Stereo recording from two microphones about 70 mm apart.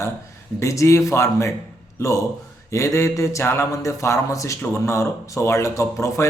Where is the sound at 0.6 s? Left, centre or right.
Left.